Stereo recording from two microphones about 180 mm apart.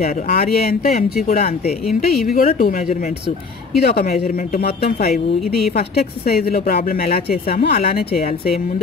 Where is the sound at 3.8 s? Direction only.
55° left (ahead or behind).